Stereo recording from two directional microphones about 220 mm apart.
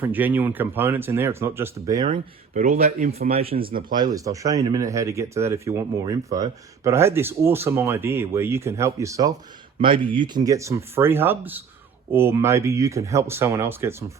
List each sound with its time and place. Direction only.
0.0 s speech: 10° right (ahead or behind)
2.0 s speech: 35° right (ahead or behind)
3.7 s speech: 40° right (ahead or behind)
3.9 s speech: 15° right (ahead or behind)